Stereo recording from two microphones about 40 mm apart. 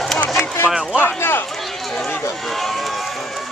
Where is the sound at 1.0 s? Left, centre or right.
Left.